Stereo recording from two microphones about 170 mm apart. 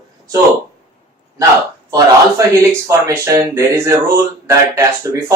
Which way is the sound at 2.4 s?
15° right (ahead or behind).